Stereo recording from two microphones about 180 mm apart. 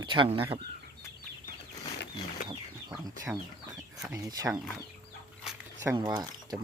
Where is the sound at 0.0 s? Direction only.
25° right (ahead or behind).